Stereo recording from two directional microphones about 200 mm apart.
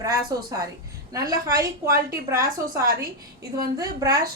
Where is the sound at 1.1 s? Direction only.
15° right (ahead or behind).